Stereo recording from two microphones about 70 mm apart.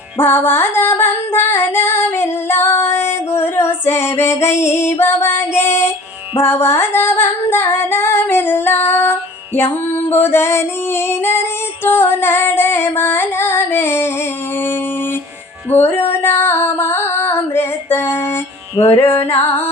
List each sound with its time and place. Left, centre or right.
0.2 s female singing: left
15.7 s female singing: left